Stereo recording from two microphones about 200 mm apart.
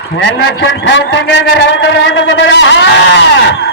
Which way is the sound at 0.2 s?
65° left (ahead or behind).